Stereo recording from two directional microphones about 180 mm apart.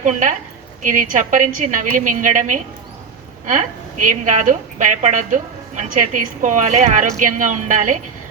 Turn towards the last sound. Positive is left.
turn(degrees=-45)  # may be behind; listen again after turning